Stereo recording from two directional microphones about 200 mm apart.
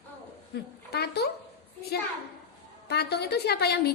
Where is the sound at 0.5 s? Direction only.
55° left (ahead or behind).